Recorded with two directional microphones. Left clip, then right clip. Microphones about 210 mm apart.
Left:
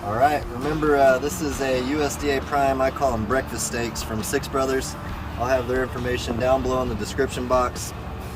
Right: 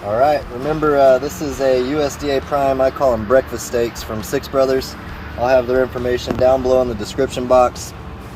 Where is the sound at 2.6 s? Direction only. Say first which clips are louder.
Right 5 dB; 20° right (ahead or behind).